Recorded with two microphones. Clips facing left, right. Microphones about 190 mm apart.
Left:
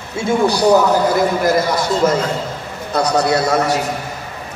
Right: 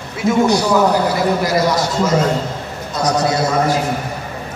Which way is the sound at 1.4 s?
55° left (ahead or behind).